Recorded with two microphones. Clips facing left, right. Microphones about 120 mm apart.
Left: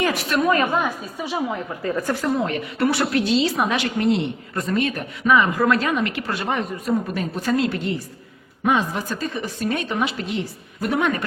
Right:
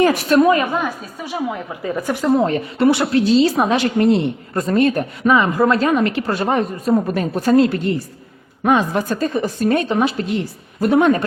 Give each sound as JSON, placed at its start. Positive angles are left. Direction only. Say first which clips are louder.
{"t": 0.0, "sound": "a woman's voice", "louder": "right 8 dB", "side_deg": -40}
{"t": 1.8, "sound": "a woman's voice", "louder": "right 3 dB", "side_deg": -15}
{"t": 2.4, "sound": "a woman's voice", "louder": "right 6 dB", "side_deg": -35}
{"t": 2.7, "sound": "a woman's voice", "louder": "right 5 dB", "side_deg": -20}